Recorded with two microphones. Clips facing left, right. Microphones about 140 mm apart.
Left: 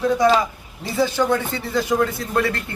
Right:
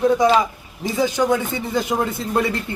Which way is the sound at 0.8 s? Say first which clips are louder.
Right 1 dB; 15° right (ahead or behind).